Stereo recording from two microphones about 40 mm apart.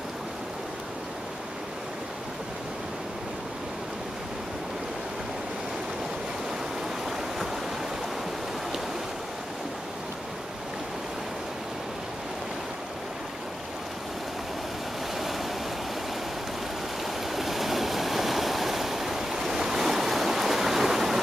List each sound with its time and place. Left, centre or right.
17.0 s stream: centre